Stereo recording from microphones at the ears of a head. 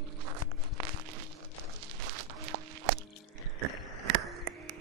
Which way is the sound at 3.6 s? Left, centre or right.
Right.